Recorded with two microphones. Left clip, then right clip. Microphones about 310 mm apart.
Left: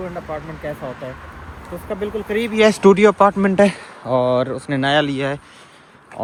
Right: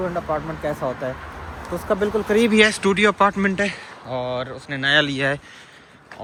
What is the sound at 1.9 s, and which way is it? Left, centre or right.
Speech, right.